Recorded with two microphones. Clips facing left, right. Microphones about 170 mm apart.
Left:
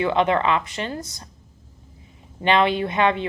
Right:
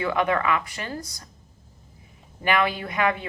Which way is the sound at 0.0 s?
25° left (ahead or behind).